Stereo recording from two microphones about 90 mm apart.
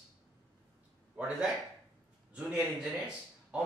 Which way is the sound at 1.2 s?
10° right (ahead or behind).